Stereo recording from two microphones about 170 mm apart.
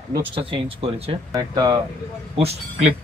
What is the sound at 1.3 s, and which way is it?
Speech, 25° right (ahead or behind).